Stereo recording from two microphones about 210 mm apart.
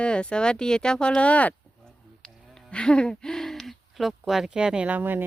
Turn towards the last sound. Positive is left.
turn(degrees=-10)  # may be behind; listen again after turning